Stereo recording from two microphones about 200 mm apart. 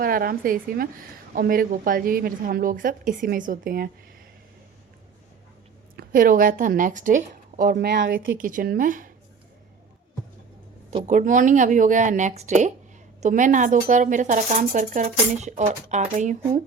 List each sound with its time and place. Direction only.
0.0 s a woman's voice: 45° right (ahead or behind)
6.0 s a woman's voice: 45° right (ahead or behind)
8.4 s speech: 45° right (ahead or behind)
10.9 s speech: 35° right (ahead or behind)